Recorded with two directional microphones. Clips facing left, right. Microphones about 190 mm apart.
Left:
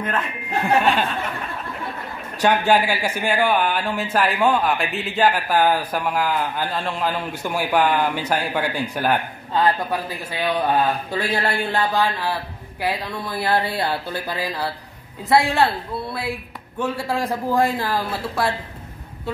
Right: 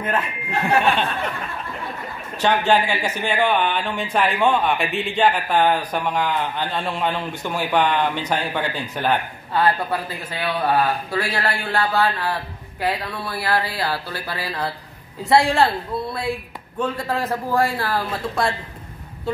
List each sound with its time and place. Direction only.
0.0 s speech: 5° right (ahead or behind)
2.4 s a man's voice: 10° left (ahead or behind)
15.2 s speech: centre (ahead or behind)